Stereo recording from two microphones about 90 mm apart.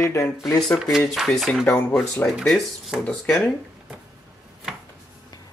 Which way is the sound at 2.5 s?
Centre (ahead or behind).